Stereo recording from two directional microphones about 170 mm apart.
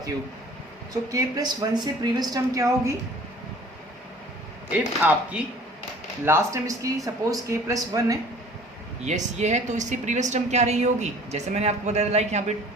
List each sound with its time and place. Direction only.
1.1 s speech: 25° right (ahead or behind)
5.0 s speech: 10° right (ahead or behind)
9.0 s a woman's voice: 45° right (ahead or behind)